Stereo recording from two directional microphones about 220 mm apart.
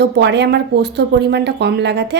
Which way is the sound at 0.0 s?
50° right (ahead or behind).